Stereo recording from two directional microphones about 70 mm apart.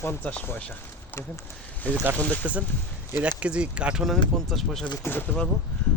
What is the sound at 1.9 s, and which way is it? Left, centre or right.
Speech, left.